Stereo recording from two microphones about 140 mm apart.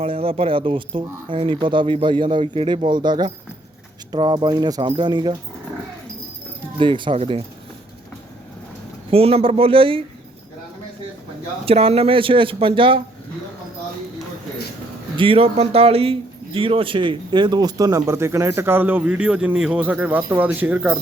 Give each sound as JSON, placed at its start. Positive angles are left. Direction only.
{"t": 0.0, "sound": "speech", "side_deg": -40}
{"t": 6.7, "sound": "speech", "side_deg": -35}
{"t": 9.0, "sound": "speech", "side_deg": -45}
{"t": 11.6, "sound": "speech", "side_deg": -45}
{"t": 15.1, "sound": "speech", "side_deg": -40}